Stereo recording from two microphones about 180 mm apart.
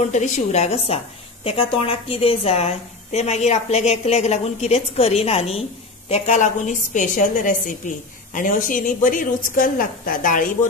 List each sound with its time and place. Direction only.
0.1 s a woman's voice: 40° left (ahead or behind)